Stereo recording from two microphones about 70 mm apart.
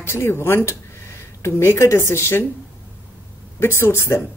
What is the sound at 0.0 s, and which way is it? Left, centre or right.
Speech, left.